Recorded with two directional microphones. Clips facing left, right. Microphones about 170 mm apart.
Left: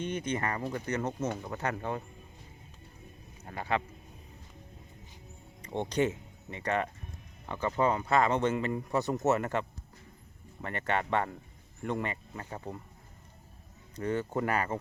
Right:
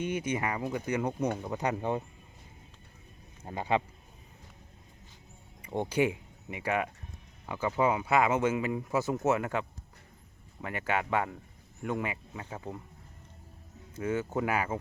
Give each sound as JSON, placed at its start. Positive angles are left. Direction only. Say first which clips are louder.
{"t": 0.0, "sound": "speech", "louder": "right 1 dB", "side_deg": -10}
{"t": 3.4, "sound": "speech", "louder": "right 3 dB", "side_deg": -20}
{"t": 5.6, "sound": "speech", "louder": "right 1 dB", "side_deg": -10}
{"t": 13.9, "sound": "speech", "louder": "even", "side_deg": -5}